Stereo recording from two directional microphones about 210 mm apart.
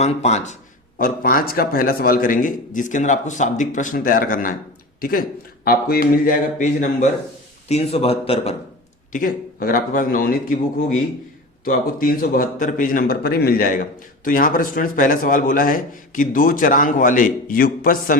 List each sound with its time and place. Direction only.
0.0 s speech: 30° left (ahead or behind)
0.9 s a man's voice: 40° left (ahead or behind)
9.1 s speech: 45° left (ahead or behind)
11.6 s a man's voice: 40° left (ahead or behind)